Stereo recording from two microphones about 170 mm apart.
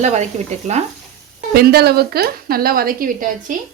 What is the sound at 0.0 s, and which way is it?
Speech, 40° right (ahead or behind).